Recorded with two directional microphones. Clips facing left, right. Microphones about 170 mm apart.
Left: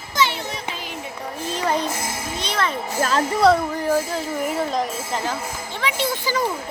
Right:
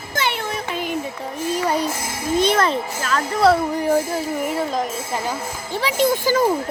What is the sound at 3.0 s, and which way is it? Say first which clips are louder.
Music: left 7 dB; 30° left (ahead or behind).